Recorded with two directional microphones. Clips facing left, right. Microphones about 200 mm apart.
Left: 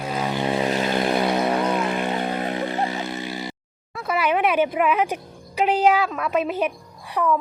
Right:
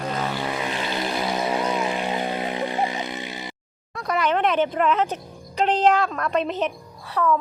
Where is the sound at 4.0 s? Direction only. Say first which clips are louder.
Left 1 dB; 5° left (ahead or behind).